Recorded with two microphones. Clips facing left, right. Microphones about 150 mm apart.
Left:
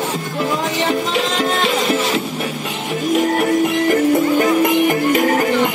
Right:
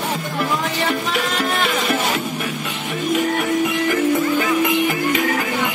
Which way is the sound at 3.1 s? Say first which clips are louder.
Left 4 dB; 45° left (ahead or behind).